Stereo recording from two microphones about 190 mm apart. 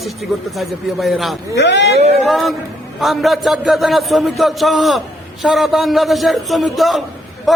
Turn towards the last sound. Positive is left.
turn(degrees=0)  # may be behind; listen again after turning